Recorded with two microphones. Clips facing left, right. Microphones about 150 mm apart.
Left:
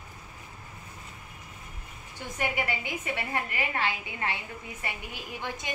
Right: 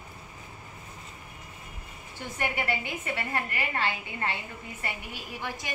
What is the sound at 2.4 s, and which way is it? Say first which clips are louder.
A woman's voice: even; 15° left (ahead or behind).